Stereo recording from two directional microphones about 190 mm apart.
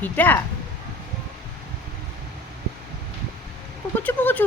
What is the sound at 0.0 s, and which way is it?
Speech, 10° left (ahead or behind).